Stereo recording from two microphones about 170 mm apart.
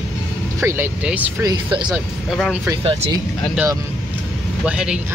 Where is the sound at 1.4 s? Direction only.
25° right (ahead or behind).